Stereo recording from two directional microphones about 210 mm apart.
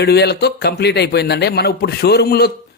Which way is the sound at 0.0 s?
50° left (ahead or behind).